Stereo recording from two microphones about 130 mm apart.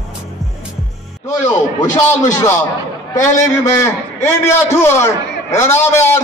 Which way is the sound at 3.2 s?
25° left (ahead or behind).